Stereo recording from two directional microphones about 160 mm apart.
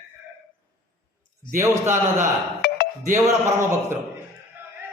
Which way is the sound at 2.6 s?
90° left.